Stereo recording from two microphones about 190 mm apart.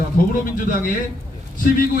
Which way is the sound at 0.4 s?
45° left (ahead or behind).